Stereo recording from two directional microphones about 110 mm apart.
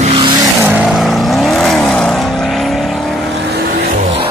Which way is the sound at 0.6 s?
20° right (ahead or behind).